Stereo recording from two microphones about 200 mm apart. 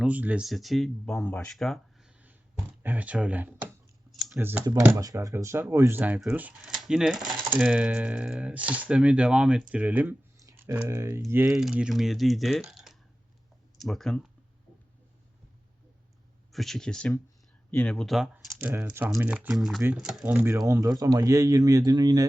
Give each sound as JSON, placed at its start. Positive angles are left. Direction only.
{"t": 0.0, "sound": "speech", "side_deg": -5}
{"t": 4.1, "sound": "computer keyboard", "side_deg": 0}
{"t": 4.4, "sound": "speech", "side_deg": -10}
{"t": 16.5, "sound": "speech", "side_deg": 0}